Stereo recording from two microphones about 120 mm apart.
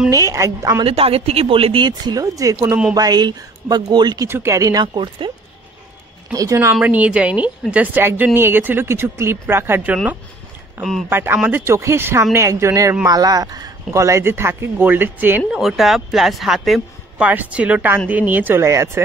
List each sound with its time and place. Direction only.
0.1 s speech: 25° right (ahead or behind)
0.8 s speech: 55° right (ahead or behind)
1.9 s speech: 35° right (ahead or behind)
4.3 s speech: 20° right (ahead or behind)
4.8 s speech: 40° right (ahead or behind)
6.3 s speech: 25° right (ahead or behind)
6.7 s speech: 10° right (ahead or behind)
11.1 s speech: 20° right (ahead or behind)
15.6 s speech: centre (ahead or behind)
17.2 s speech: 15° right (ahead or behind)